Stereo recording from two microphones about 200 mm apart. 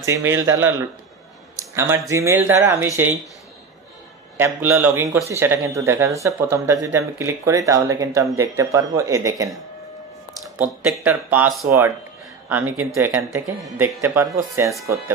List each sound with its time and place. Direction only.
0.0 s speech: 15° right (ahead or behind)
2.0 s speech: 15° right (ahead or behind)
4.4 s speech: 10° right (ahead or behind)
10.6 s speech: 10° right (ahead or behind)